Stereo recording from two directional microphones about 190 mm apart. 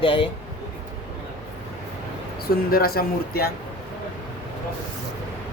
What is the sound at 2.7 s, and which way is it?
Speech, 50° left (ahead or behind).